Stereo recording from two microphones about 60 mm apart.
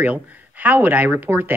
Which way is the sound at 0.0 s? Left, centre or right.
Right.